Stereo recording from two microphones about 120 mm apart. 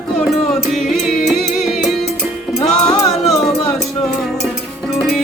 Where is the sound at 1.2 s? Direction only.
Centre (ahead or behind).